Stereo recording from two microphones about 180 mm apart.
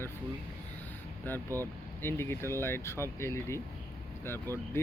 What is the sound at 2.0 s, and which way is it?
Speech, 15° left (ahead or behind).